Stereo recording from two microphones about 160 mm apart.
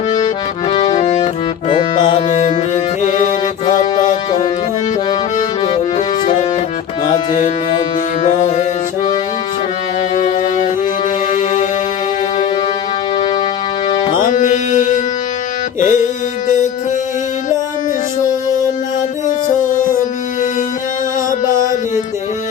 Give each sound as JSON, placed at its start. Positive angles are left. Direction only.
{"t": 0.7, "sound": "accordion", "side_deg": 30}
{"t": 0.9, "sound": "music", "side_deg": 50}
{"t": 2.3, "sound": "music", "side_deg": 50}
{"t": 5.4, "sound": "music", "side_deg": 45}
{"t": 7.1, "sound": "music", "side_deg": 50}
{"t": 11.3, "sound": "music", "side_deg": 50}
{"t": 14.1, "sound": "music", "side_deg": 50}
{"t": 19.5, "sound": "music", "side_deg": 55}
{"t": 21.5, "sound": "music", "side_deg": -20}